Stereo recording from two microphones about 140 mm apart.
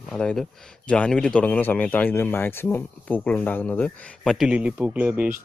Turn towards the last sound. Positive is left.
turn(degrees=-10)  # may be behind; listen again after turning